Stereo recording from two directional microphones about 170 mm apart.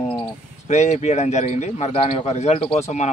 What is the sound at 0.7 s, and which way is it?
A man's voice, 40° left (ahead or behind).